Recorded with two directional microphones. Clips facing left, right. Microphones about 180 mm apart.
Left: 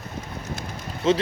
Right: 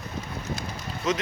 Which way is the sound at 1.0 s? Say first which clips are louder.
Left 6 dB; 30° left (ahead or behind).